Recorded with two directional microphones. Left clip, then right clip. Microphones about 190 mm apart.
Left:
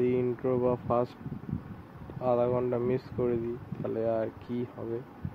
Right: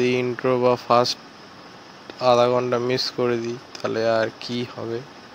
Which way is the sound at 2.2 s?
20° right (ahead or behind).